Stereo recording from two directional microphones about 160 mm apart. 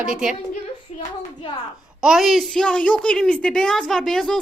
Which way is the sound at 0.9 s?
45° left (ahead or behind).